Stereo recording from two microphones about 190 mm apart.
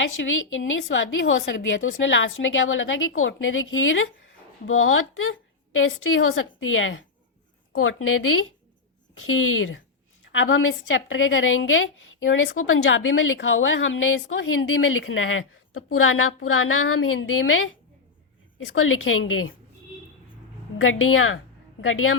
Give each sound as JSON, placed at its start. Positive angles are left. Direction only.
{"t": 0.0, "sound": "a woman's voice", "side_deg": 85}
{"t": 20.8, "sound": "a woman's voice", "side_deg": 90}